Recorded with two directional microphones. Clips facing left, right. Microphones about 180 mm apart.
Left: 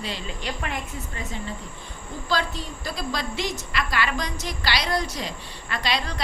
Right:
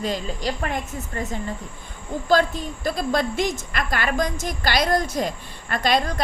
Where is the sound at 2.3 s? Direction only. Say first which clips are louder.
Right 7 dB; 50° right (ahead or behind).